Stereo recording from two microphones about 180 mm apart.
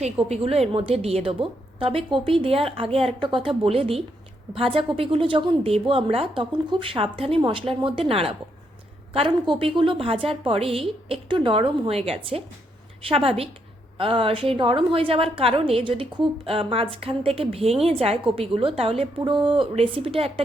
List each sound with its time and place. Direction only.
0.0 s a woman's voice: 35° right (ahead or behind)